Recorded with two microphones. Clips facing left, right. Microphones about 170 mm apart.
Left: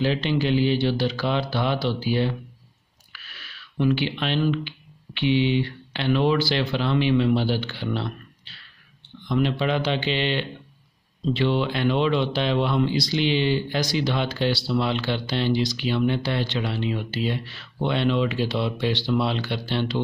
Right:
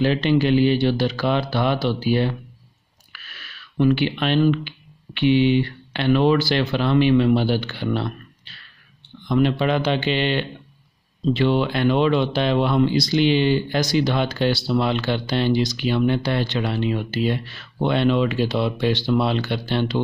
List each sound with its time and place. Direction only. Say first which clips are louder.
0.0 s speech: right 4 dB; 55° right (ahead or behind)